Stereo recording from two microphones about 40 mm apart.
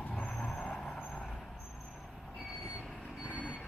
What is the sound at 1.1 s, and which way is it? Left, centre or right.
Vehicle, centre.